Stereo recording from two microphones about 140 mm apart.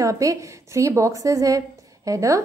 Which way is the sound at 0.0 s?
25° right (ahead or behind).